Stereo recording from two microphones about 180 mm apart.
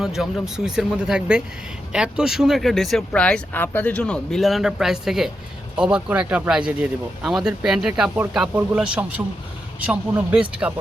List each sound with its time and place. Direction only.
0.0 s speech: centre (ahead or behind)